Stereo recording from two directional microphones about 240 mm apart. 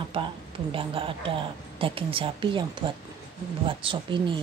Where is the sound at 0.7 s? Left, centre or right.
Right.